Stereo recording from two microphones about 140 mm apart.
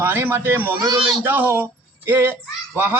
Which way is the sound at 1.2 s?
15° right (ahead or behind).